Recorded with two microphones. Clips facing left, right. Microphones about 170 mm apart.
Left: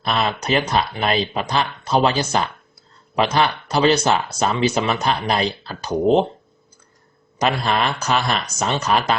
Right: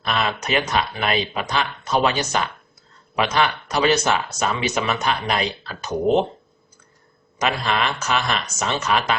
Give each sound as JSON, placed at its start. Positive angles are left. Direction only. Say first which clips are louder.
{"t": 0.0, "sound": "speech", "louder": "left 2 dB", "side_deg": 35}
{"t": 7.3, "sound": "speech", "louder": "left 2 dB", "side_deg": 35}